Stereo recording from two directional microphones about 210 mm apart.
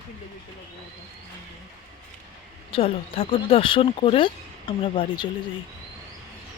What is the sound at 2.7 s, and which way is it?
Speech, 25° left (ahead or behind).